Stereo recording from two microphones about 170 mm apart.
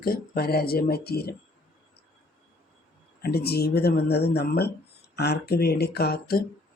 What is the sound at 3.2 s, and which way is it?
Speech, 70° left (ahead or behind).